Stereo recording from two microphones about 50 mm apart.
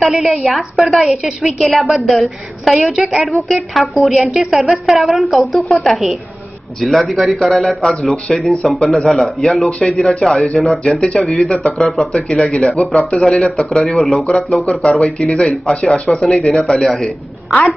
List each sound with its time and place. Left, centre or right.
0.1 s a woman's voice: centre
10.0 s a woman's voice: centre
14.2 s a woman's voice: centre